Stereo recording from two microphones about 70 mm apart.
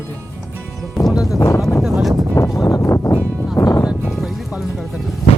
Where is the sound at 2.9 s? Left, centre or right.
Left.